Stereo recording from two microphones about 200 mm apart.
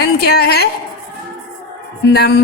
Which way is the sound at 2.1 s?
50° left (ahead or behind).